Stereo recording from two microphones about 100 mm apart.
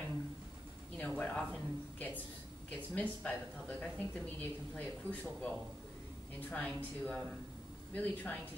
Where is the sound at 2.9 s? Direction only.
15° left (ahead or behind).